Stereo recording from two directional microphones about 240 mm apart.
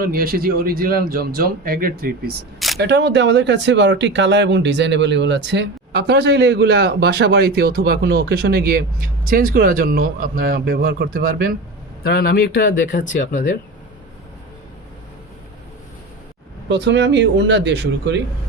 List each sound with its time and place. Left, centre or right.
0.0 s speech: right
12.0 s speech: left
16.6 s speech: right